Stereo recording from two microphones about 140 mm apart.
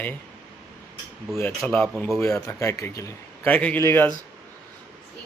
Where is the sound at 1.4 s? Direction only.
10° left (ahead or behind).